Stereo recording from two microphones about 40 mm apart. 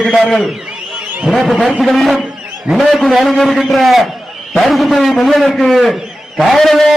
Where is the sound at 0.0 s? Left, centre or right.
Centre.